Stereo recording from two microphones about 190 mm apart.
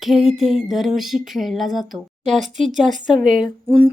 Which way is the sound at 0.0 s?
Centre (ahead or behind).